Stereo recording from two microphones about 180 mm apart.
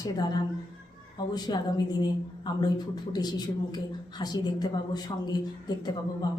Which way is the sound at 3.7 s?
25° left (ahead or behind).